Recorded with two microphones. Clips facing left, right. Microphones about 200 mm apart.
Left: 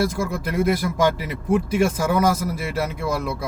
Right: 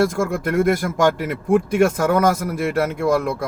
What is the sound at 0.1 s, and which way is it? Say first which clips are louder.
Speech: right 4 dB; 50° right (ahead or behind).